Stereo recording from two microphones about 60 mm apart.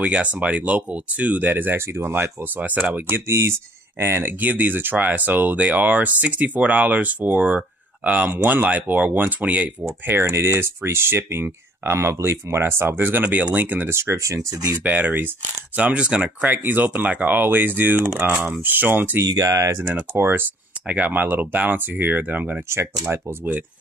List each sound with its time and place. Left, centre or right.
0.0 s speech: right
2.0 s speech: right
3.3 s speech: right
4.4 s speech: right
10.2 s speech: right
13.9 s speech: right
14.8 s speech: right
16.4 s speech: right
19.2 s speech: right
19.9 s speech: right